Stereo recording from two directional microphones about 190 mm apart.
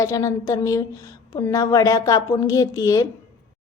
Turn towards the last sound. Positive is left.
turn(degrees=20)  # may be behind; listen again after turning